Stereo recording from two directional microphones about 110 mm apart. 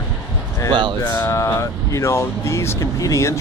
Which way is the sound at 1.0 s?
20° left (ahead or behind).